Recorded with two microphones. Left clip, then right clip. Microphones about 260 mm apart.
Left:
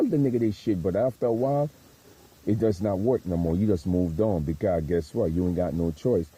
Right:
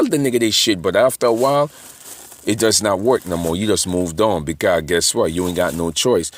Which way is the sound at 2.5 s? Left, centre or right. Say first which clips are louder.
Right 9 dB; centre.